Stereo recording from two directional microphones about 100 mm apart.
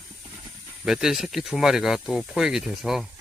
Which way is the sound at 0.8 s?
5° right (ahead or behind).